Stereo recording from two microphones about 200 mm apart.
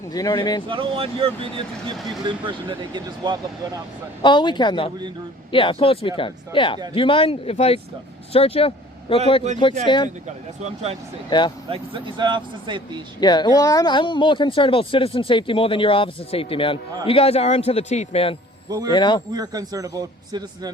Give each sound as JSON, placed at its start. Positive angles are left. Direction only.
{"t": 0.1, "sound": "speech", "side_deg": 20}
{"t": 0.7, "sound": "speech", "side_deg": -25}
{"t": 4.2, "sound": "speech", "side_deg": 25}
{"t": 10.2, "sound": "speech", "side_deg": -35}
{"t": 11.3, "sound": "speech", "side_deg": 25}
{"t": 11.7, "sound": "speech", "side_deg": -25}
{"t": 13.1, "sound": "a man's voice", "side_deg": 20}
{"t": 18.7, "sound": "speech", "side_deg": -20}
{"t": 18.9, "sound": "speech", "side_deg": 20}
{"t": 19.3, "sound": "speech", "side_deg": -20}